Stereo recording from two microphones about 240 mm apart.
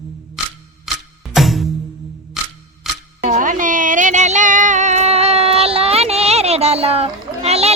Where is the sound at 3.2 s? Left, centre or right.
Right.